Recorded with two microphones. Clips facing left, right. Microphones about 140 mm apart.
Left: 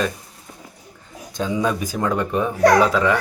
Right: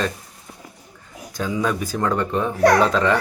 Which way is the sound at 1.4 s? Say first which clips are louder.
Left 1 dB; 20° left (ahead or behind).